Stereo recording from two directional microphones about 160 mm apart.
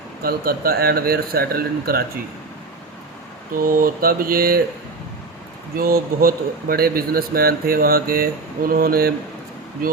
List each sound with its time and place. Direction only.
0.2 s speech: 70° right (ahead or behind)
3.5 s mantra: 60° right (ahead or behind)
5.7 s speech: 65° right (ahead or behind)